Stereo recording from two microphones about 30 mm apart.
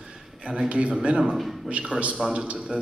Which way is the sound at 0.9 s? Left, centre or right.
Right.